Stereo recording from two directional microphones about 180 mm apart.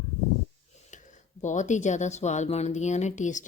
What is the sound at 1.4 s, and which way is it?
Speech, 40° left (ahead or behind).